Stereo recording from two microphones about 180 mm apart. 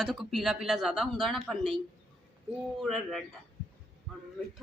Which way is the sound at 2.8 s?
Centre (ahead or behind).